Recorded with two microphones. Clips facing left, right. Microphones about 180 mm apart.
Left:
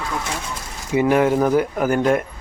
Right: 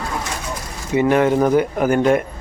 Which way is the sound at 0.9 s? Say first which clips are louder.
Right 1 dB; 5° left (ahead or behind).